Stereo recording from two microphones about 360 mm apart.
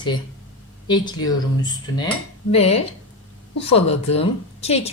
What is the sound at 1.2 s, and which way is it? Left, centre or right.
Speech, centre.